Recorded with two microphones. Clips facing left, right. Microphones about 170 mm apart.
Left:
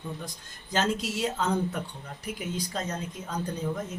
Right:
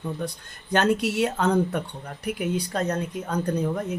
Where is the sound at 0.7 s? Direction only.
65° right (ahead or behind).